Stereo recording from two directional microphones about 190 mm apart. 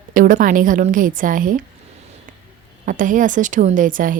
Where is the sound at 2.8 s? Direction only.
45° right (ahead or behind).